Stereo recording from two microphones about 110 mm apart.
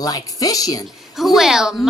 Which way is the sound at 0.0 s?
35° left (ahead or behind).